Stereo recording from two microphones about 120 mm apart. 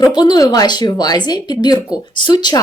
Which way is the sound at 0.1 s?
35° left (ahead or behind).